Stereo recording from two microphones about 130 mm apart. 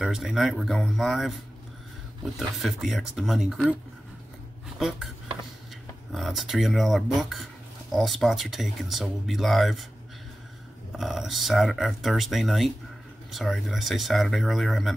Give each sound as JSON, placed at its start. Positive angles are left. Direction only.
{"t": 0.0, "sound": "speech", "side_deg": -5}
{"t": 4.7, "sound": "speech", "side_deg": -5}
{"t": 6.1, "sound": "speech", "side_deg": 0}
{"t": 10.9, "sound": "speech", "side_deg": -5}